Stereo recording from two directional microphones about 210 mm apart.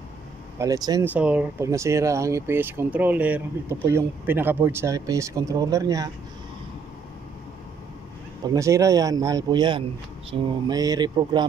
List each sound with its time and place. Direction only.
0.6 s speech: 15° right (ahead or behind)
1.1 s speech: 5° right (ahead or behind)
8.5 s speech: 15° right (ahead or behind)
10.7 s speech: 20° right (ahead or behind)